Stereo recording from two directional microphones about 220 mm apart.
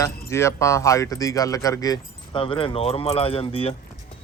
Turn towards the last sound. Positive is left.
turn(degrees=25)  # may be behind; listen again after turning